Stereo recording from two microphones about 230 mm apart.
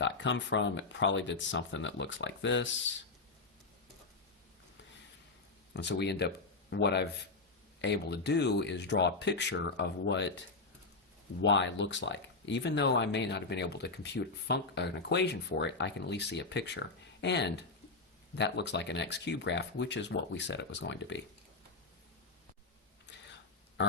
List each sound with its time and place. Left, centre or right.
0.0 s speech: left
5.7 s speech: left
11.4 s speech: left